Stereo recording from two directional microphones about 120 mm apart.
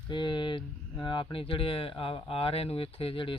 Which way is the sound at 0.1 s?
40° left (ahead or behind).